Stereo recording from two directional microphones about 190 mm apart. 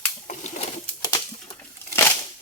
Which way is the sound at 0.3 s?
40° left (ahead or behind).